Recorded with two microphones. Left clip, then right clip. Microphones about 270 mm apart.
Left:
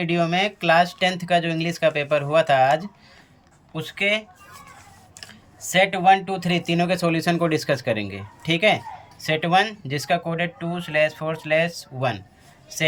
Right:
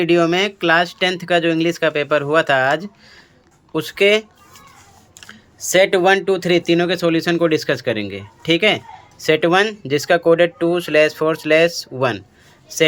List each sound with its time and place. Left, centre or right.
0.0 s speech: centre
5.3 s speech: centre